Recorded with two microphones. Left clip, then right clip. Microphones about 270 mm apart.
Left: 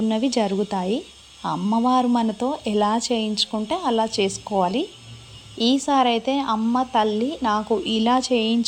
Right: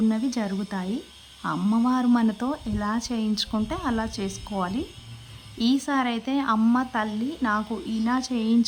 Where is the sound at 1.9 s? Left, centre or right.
Centre.